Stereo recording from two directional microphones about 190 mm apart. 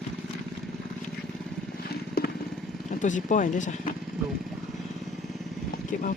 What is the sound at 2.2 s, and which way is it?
Vehicle, 55° left (ahead or behind).